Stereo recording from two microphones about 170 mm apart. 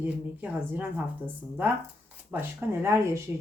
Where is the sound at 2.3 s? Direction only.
15° right (ahead or behind).